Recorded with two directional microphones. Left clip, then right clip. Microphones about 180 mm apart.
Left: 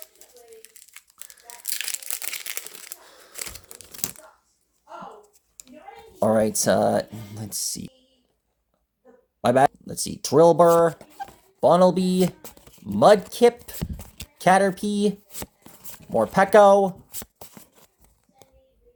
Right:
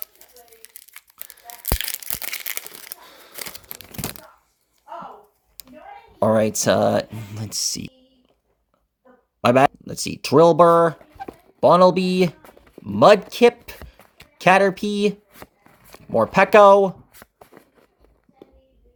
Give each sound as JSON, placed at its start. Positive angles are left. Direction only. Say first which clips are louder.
{"t": 0.0, "sound": "crumpling", "louder": "right 1 dB", "side_deg": -45}
{"t": 3.0, "sound": "scissors", "louder": "right 4 dB", "side_deg": -25}
{"t": 3.3, "sound": "crumpling", "louder": "right 2 dB", "side_deg": -45}
{"t": 6.1, "sound": "speech", "louder": "right 2 dB", "side_deg": -25}
{"t": 9.4, "sound": "speech", "louder": "right 3 dB", "side_deg": -25}
{"t": 13.7, "sound": "a sound", "louder": "left 5 dB", "side_deg": 50}
{"t": 14.3, "sound": "speech", "louder": "right 3 dB", "side_deg": -25}
{"t": 15.3, "sound": "shuffling cards", "louder": "left 4 dB", "side_deg": 50}
{"t": 16.1, "sound": "speech", "louder": "right 3 dB", "side_deg": -25}